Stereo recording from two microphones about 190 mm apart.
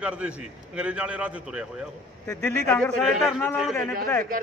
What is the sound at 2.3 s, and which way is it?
Speech, 15° left (ahead or behind).